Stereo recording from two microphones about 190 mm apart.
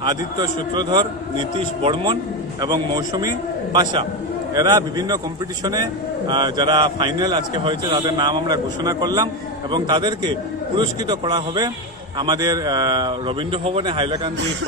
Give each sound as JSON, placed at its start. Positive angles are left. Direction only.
{"t": 0.4, "sound": "a man's voice", "side_deg": -20}